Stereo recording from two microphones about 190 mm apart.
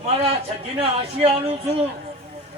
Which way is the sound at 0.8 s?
30° right (ahead or behind).